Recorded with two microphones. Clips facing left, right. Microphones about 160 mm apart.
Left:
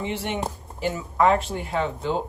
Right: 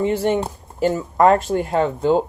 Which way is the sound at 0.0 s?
40° right (ahead or behind).